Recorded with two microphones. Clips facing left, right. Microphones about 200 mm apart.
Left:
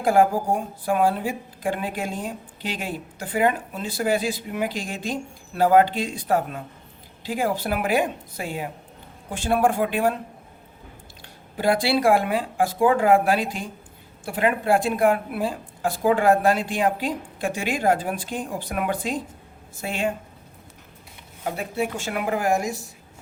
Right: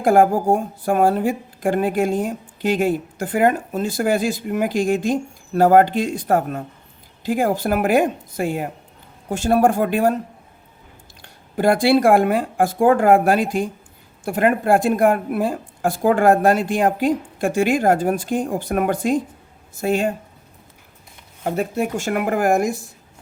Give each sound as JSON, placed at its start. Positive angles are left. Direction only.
{"t": 0.0, "sound": "a woman's voice", "side_deg": -50}
{"t": 11.2, "sound": "a woman's voice", "side_deg": -50}
{"t": 21.4, "sound": "a woman's voice", "side_deg": -45}